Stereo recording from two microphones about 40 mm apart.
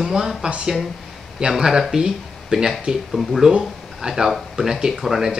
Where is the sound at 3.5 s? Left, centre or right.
Centre.